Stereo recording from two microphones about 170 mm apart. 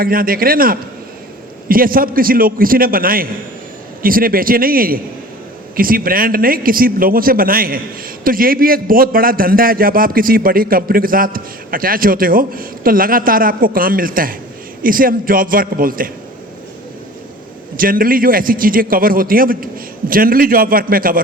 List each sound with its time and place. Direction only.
0.0 s a man's voice: 60° right (ahead or behind)
17.7 s a man's voice: 55° right (ahead or behind)